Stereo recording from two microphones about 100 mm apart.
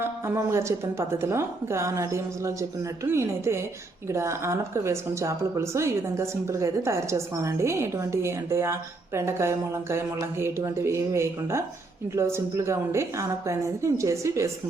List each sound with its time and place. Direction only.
0.0 s a woman's voice: 30° right (ahead or behind)